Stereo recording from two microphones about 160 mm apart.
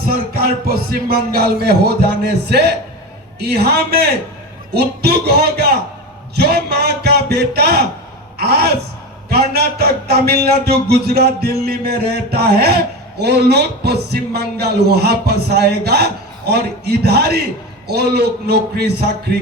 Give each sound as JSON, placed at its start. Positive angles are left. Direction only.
{"t": 0.0, "sound": "music", "side_deg": -65}
{"t": 3.4, "sound": "a man's voice", "side_deg": -90}